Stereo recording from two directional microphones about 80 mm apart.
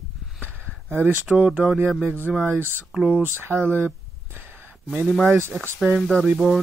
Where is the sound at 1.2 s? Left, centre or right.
Centre.